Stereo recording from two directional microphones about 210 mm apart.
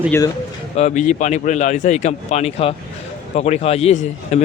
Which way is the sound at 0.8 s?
35° left (ahead or behind).